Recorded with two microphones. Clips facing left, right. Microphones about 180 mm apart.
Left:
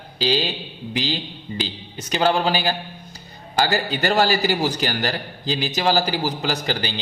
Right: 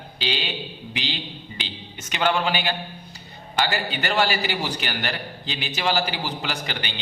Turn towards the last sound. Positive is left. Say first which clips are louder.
# left 6 dB
turn(degrees=35)  # may be behind; listen again after turning